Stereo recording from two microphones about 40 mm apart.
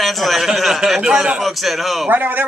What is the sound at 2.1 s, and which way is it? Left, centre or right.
Speech, right.